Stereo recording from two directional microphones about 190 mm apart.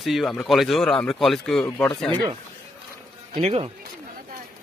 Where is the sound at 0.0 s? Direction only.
Centre (ahead or behind).